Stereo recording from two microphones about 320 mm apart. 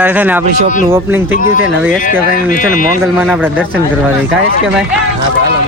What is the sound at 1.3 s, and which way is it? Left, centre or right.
Speech, left.